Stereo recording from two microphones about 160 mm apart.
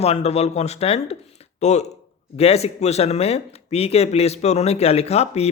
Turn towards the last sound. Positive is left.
turn(degrees=40)  # may be behind; listen again after turning